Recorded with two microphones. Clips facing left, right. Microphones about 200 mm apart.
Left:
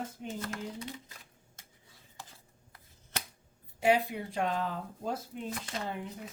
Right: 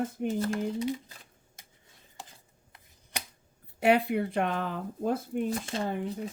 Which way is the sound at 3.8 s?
65° right (ahead or behind).